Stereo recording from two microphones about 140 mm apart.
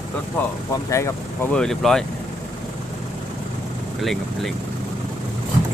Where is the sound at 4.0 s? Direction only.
Centre (ahead or behind).